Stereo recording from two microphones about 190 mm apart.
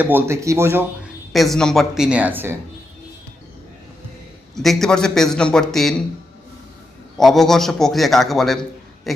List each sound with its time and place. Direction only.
0.0 s speech: 10° right (ahead or behind)
1.3 s a man's voice: centre (ahead or behind)
4.5 s a man's voice: centre (ahead or behind)
7.2 s a man's voice: centre (ahead or behind)